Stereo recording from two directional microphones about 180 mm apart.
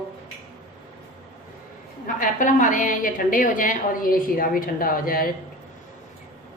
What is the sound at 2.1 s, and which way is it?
A woman's voice, 45° left (ahead or behind).